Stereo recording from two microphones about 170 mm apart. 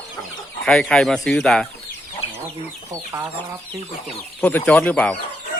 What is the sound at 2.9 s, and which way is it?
Speech, 20° right (ahead or behind).